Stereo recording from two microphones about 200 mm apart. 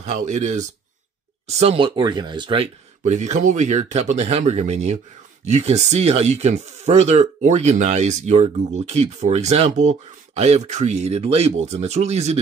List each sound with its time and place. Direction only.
0.0 s speech: 35° right (ahead or behind)